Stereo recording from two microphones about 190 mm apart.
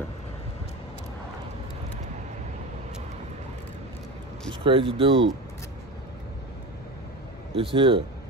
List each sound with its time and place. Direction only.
4.5 s speech: 25° right (ahead or behind)
7.7 s speech: 25° right (ahead or behind)